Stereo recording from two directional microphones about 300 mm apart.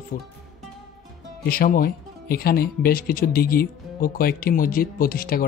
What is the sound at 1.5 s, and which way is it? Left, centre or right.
Speech, left.